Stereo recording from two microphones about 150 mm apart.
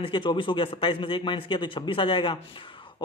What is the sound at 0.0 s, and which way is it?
A man's voice, 35° left (ahead or behind).